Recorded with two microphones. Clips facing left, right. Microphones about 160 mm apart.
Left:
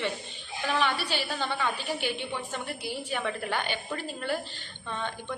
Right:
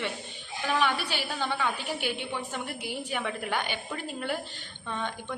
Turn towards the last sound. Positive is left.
turn(degrees=-10)  # may be behind; listen again after turning